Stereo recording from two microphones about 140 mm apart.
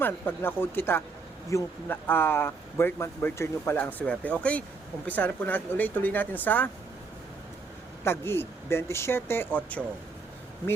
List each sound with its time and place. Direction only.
0.0 s speech: 15° left (ahead or behind)
8.0 s speech: 15° left (ahead or behind)